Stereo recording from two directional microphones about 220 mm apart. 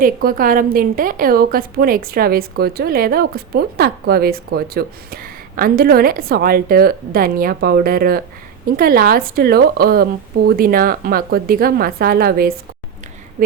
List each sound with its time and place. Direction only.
0.0 s a woman's voice: 40° right (ahead or behind)